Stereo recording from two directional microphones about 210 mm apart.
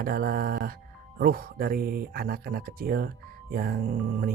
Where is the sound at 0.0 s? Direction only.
45° right (ahead or behind).